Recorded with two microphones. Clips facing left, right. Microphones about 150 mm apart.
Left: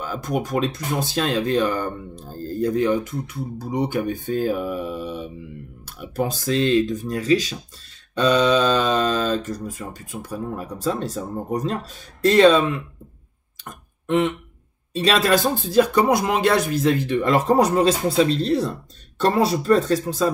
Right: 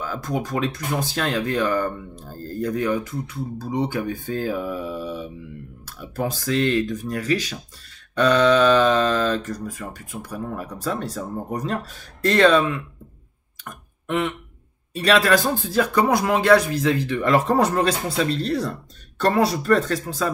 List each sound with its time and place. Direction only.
0.0 s speech: 20° left (ahead or behind)
14.0 s speech: 20° left (ahead or behind)